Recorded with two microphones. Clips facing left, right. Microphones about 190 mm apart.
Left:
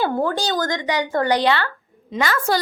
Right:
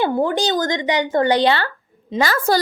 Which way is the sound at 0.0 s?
20° right (ahead or behind).